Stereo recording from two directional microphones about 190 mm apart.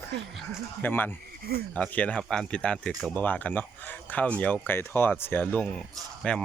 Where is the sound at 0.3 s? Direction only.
10° left (ahead or behind).